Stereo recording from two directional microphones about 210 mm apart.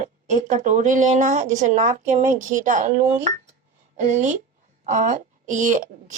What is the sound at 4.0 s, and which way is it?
Speech, 35° right (ahead or behind).